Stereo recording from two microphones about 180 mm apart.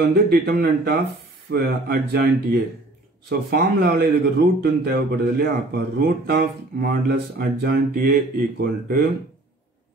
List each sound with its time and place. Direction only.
0.0 s speech: 60° right (ahead or behind)